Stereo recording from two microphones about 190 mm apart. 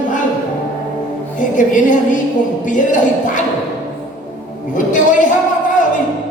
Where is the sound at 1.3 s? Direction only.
45° left (ahead or behind).